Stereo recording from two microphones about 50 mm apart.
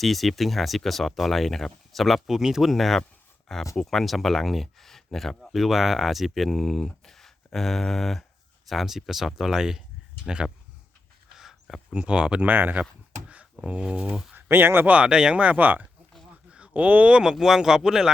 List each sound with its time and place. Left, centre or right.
0.0 s speech: centre
11.3 s a sound: centre
11.9 s speech: centre
12.4 s speech: right
12.8 s a sound: right
13.7 s speech: right
14.3 s speech: right
14.9 s speech: centre
16.5 s a sound: right
17.3 s speech: centre